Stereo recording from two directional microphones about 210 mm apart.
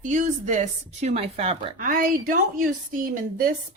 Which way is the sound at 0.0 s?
35° right (ahead or behind).